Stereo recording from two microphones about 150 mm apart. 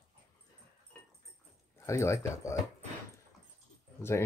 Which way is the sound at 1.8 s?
20° left (ahead or behind).